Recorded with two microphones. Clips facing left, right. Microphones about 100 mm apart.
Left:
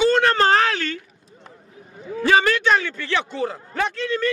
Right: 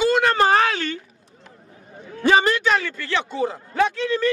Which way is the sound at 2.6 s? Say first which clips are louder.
Left 2 dB; centre (ahead or behind).